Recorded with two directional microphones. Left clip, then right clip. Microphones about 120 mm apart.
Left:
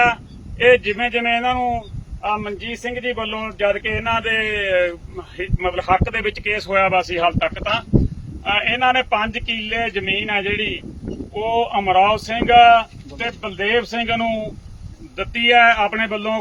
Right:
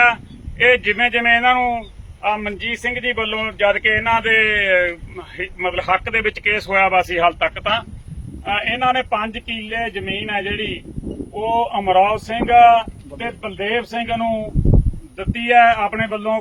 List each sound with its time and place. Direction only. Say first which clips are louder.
0.6 s speech: even; 35° left (ahead or behind)
2.4 s a sound: right 4 dB; 40° left (ahead or behind)
2.7 s speech: right 5 dB; 30° left (ahead or behind)
3.0 s speech: right 1 dB; 40° left (ahead or behind)
3.4 s a sound: right 4 dB; 35° left (ahead or behind)
5.1 s speech: right 1 dB; 30° left (ahead or behind)
7.3 s speech: right 2 dB; 40° left (ahead or behind)